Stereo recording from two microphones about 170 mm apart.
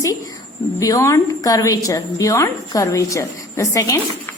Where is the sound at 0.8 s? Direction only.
20° left (ahead or behind).